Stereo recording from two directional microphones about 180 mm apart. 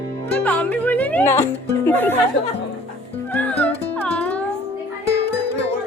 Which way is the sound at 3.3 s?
10° left (ahead or behind).